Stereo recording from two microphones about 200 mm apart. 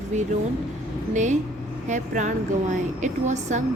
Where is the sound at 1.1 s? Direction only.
35° right (ahead or behind).